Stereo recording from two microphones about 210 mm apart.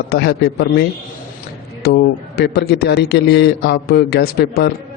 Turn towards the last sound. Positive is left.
turn(degrees=50)  # may be behind; listen again after turning